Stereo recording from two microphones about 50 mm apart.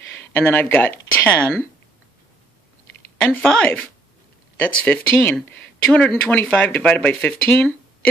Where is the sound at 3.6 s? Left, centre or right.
Left.